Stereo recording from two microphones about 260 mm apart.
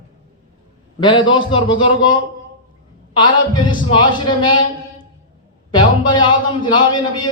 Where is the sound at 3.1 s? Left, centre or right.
Centre.